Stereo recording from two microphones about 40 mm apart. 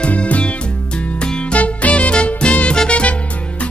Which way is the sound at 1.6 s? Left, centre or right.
Left.